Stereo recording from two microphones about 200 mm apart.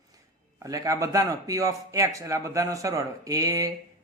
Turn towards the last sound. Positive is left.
turn(degrees=-15)  # may be behind; listen again after turning